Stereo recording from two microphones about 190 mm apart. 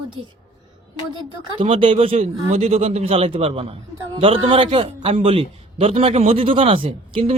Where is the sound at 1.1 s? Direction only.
25° right (ahead or behind).